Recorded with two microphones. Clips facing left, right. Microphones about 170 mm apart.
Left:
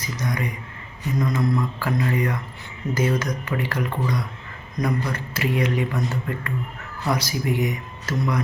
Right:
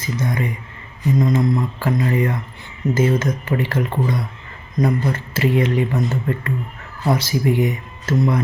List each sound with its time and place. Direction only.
0.0 s speech: 25° right (ahead or behind)